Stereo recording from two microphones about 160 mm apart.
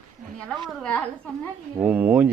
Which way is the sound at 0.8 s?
5° left (ahead or behind).